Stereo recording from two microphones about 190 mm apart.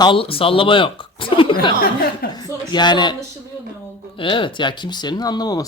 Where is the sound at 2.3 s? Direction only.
20° left (ahead or behind).